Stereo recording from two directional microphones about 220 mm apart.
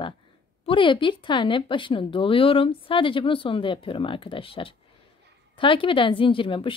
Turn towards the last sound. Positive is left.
turn(degrees=25)  # may be behind; listen again after turning